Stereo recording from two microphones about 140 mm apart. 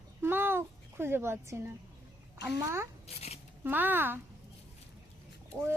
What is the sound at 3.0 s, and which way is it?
Speech, 45° left (ahead or behind).